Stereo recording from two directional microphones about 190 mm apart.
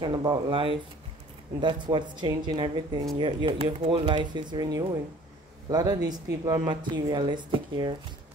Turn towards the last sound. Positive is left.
turn(degrees=-25)  # may be behind; listen again after turning